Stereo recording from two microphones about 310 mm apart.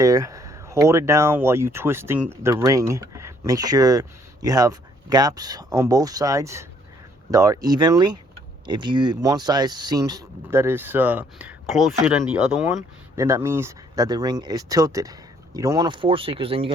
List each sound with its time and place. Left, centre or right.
0.0 s speech: centre